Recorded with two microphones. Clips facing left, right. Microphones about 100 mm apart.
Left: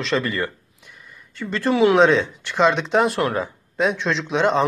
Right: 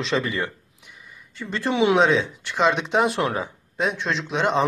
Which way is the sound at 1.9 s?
Centre (ahead or behind).